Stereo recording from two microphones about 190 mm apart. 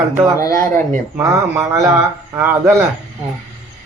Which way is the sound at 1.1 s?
10° right (ahead or behind).